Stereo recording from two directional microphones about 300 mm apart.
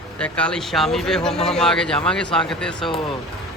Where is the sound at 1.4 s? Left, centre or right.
Centre.